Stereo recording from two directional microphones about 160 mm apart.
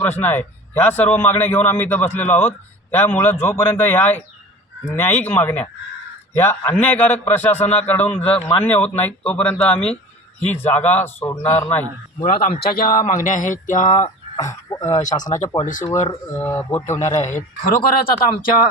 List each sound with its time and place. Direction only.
0.0 s a man's voice: 10° left (ahead or behind)
8.3 s speech: 30° left (ahead or behind)
8.6 s a man's voice: 10° left (ahead or behind)
12.2 s speech: 60° left (ahead or behind)
13.8 s speech: 25° left (ahead or behind)
17.7 s speech: 65° left (ahead or behind)